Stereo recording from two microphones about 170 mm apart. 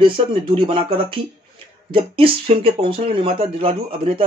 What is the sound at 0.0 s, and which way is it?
Speech, 30° right (ahead or behind).